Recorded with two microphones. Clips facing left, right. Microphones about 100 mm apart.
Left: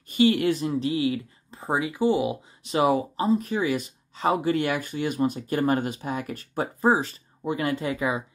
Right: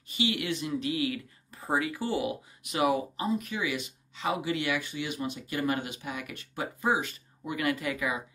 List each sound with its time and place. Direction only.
0.1 s speech: 45° left (ahead or behind); by 2.3 s 20° left (ahead or behind)
2.6 s speech: 30° left (ahead or behind)